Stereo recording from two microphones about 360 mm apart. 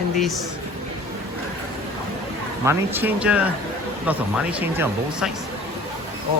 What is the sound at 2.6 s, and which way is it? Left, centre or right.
Speech, centre.